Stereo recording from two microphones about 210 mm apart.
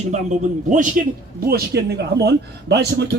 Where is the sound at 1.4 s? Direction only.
45° right (ahead or behind).